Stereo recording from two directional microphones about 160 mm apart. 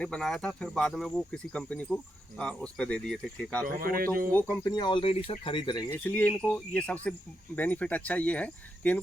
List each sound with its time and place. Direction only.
0.0 s speech: 5° left (ahead or behind)
3.8 s speech: 65° right (ahead or behind)
4.3 s speech: 10° left (ahead or behind); by 5.8 s 30° left (ahead or behind)
5.9 s speech: 10° left (ahead or behind)